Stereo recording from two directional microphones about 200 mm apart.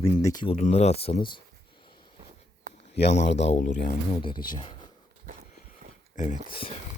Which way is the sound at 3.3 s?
35° left (ahead or behind).